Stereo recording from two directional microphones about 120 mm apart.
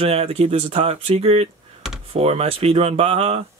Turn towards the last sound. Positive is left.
turn(degrees=-60)  # may be behind; listen again after turning